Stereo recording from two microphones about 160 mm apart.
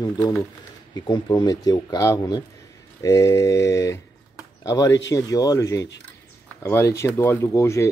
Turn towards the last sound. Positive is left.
turn(degrees=20)  # may be behind; listen again after turning